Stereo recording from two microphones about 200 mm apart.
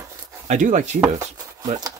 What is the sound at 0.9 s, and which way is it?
Chopping, 10° right (ahead or behind).